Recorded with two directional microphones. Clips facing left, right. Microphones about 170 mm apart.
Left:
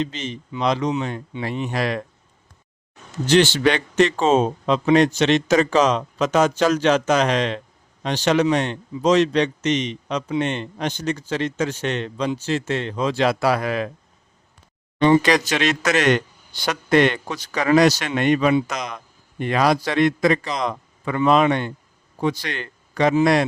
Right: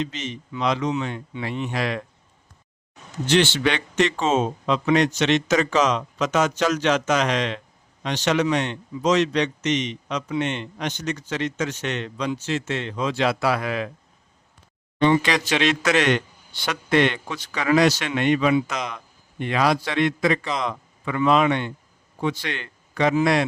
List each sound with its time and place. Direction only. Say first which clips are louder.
0.0 s speech: left 2 dB; 30° left (ahead or behind)
3.2 s speech: left 3 dB; 40° left (ahead or behind)
15.0 s a man's voice: left 4 dB; 40° left (ahead or behind)